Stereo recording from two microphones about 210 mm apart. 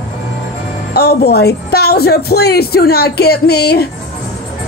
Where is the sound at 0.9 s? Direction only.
50° left (ahead or behind).